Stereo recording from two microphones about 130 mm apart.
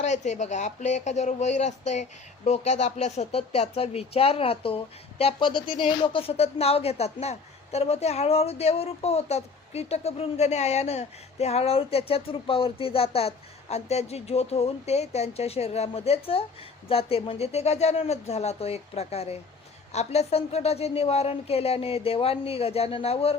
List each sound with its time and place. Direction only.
0.0 s speech: 65° left (ahead or behind)